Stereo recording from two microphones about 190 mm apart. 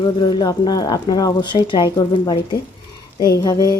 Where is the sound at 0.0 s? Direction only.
25° left (ahead or behind).